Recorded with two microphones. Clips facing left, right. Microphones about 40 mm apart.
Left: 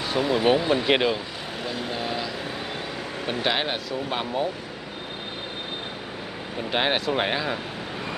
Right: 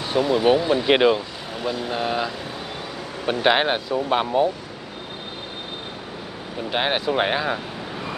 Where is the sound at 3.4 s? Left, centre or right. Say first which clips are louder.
Right 8 dB; centre.